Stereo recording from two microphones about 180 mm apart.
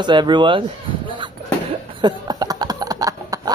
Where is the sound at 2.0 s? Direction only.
25° right (ahead or behind).